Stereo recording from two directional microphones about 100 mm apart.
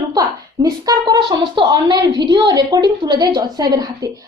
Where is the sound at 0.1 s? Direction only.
40° right (ahead or behind).